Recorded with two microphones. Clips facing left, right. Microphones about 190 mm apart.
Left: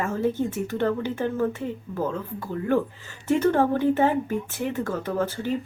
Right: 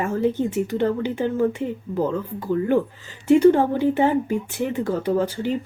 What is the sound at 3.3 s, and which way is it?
A woman's voice, 15° right (ahead or behind).